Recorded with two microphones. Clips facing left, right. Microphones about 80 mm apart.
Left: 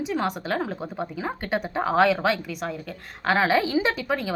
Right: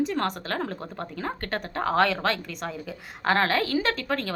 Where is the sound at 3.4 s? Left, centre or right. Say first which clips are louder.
Left 3 dB; centre.